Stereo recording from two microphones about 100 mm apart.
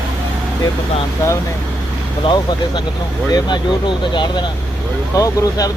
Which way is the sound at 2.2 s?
50° left (ahead or behind).